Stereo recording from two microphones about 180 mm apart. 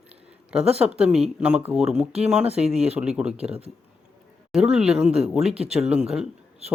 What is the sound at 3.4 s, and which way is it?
Speech, 35° right (ahead or behind).